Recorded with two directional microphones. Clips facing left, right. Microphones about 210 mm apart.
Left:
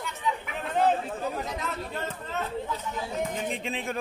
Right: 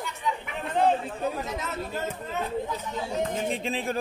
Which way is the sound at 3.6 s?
35° right (ahead or behind).